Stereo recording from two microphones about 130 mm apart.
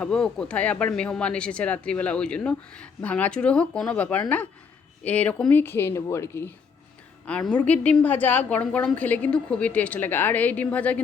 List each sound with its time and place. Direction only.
0.0 s speech: 5° left (ahead or behind)
7.3 s speech: 10° left (ahead or behind)